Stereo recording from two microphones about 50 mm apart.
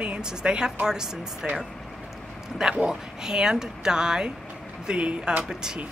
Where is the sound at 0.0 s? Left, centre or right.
Centre.